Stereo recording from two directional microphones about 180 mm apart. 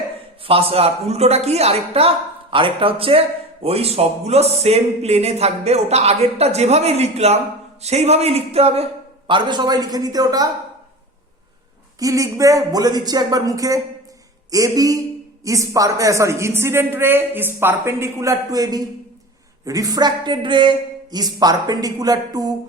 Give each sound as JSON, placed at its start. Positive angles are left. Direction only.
{"t": 0.4, "sound": "a man's voice", "side_deg": -30}
{"t": 11.9, "sound": "a man's voice", "side_deg": -20}